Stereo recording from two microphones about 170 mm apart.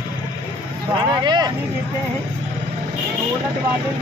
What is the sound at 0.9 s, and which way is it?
Speech, 25° right (ahead or behind).